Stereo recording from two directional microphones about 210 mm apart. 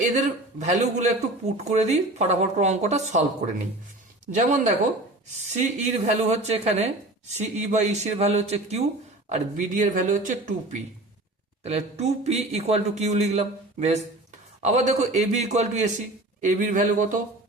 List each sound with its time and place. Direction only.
0.6 s speech: 35° right (ahead or behind)